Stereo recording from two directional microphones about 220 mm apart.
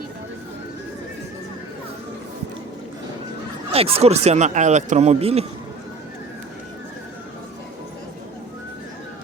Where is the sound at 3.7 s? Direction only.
25° right (ahead or behind).